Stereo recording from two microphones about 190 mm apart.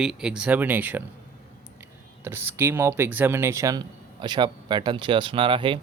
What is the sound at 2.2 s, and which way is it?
Speech, 10° right (ahead or behind).